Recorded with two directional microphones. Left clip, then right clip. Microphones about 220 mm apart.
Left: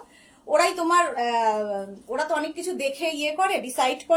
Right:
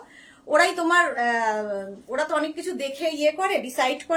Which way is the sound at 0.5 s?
20° right (ahead or behind).